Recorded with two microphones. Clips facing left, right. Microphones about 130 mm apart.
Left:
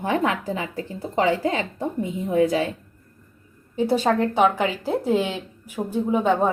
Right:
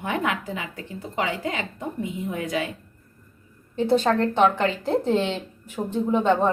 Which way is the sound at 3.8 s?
10° left (ahead or behind).